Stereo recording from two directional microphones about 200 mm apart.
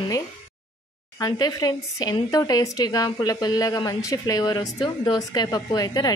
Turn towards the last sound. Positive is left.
turn(degrees=20)  # may be behind; listen again after turning